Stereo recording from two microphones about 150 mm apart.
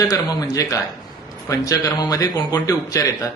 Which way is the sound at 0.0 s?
25° left (ahead or behind).